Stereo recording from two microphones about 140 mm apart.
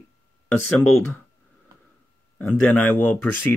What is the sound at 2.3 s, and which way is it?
Speech, 10° left (ahead or behind).